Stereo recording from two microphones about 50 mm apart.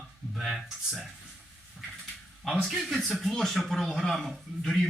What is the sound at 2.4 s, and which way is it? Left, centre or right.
A man's voice, centre.